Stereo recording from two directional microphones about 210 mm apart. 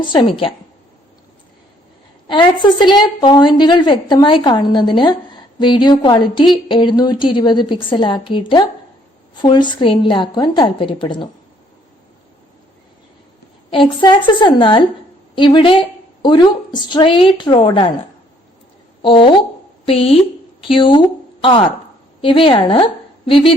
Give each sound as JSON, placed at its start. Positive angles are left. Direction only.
{"t": 0.0, "sound": "a woman's voice", "side_deg": 25}
{"t": 2.2, "sound": "a woman's voice", "side_deg": 20}
{"t": 13.7, "sound": "a woman's voice", "side_deg": 25}
{"t": 19.0, "sound": "a woman's voice", "side_deg": 25}
{"t": 22.2, "sound": "a woman's voice", "side_deg": 25}